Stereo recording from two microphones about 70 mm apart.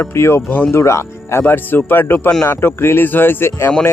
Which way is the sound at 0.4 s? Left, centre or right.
Left.